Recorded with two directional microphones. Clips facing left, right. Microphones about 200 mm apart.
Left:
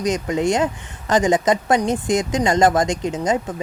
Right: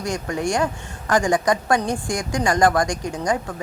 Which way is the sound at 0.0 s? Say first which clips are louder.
Left 5 dB; 20° left (ahead or behind).